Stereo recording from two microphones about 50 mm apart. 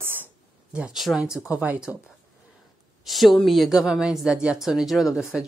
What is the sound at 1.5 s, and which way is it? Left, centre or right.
Speech, right.